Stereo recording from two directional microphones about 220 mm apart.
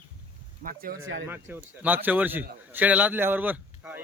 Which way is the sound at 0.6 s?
40° right (ahead or behind).